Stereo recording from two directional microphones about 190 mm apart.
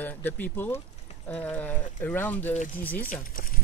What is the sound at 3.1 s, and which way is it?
Speech, 45° left (ahead or behind).